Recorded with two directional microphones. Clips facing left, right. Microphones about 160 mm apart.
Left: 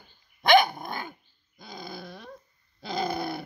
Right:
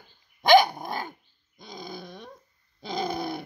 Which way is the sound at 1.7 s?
5° left (ahead or behind).